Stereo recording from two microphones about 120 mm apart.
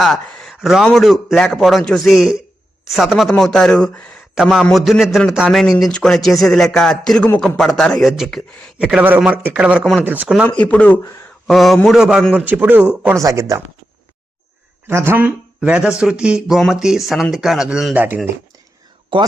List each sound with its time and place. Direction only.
0.0 s speech: centre (ahead or behind)
4.4 s speech: 5° right (ahead or behind)
8.8 s a man's voice: 10° right (ahead or behind)
10.4 s speech: 10° left (ahead or behind)
11.4 s a man's voice: centre (ahead or behind)
13.2 s speech: 30° right (ahead or behind)
14.8 s speech: 20° right (ahead or behind); by 17.9 s 5° right (ahead or behind)
17.9 s a man's voice: 15° right (ahead or behind)